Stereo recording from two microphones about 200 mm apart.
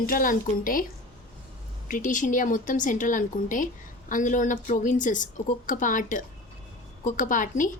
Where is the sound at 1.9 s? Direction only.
40° left (ahead or behind).